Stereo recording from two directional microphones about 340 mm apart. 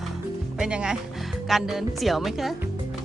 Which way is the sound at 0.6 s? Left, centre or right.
Centre.